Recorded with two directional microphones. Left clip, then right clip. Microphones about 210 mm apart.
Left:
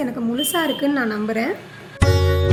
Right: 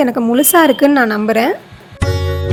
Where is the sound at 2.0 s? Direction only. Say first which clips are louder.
Even; centre (ahead or behind).